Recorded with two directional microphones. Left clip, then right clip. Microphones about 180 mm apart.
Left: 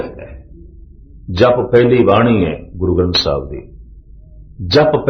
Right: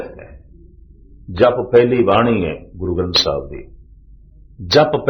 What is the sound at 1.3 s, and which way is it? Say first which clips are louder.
Speech: left 1 dB; 15° right (ahead or behind).